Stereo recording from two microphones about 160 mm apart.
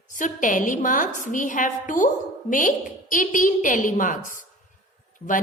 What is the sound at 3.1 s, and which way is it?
A woman's voice, 55° left (ahead or behind).